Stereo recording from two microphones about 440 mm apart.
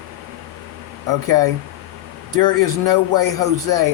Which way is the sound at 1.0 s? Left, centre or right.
Right.